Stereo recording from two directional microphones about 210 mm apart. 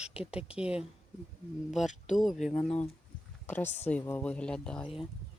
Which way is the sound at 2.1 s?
Centre (ahead or behind).